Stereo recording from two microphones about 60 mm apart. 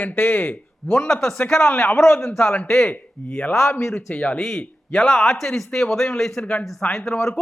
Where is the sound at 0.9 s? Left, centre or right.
Centre.